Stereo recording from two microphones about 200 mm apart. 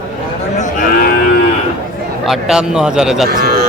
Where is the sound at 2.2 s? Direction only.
5° right (ahead or behind).